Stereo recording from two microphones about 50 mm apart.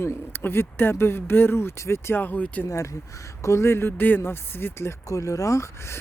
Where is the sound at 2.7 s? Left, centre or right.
Left.